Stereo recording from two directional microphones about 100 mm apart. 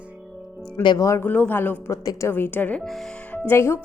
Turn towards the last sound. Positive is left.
turn(degrees=25)  # may be behind; listen again after turning